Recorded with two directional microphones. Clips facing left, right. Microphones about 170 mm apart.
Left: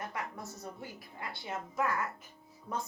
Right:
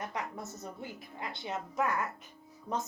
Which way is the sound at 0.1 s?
20° right (ahead or behind).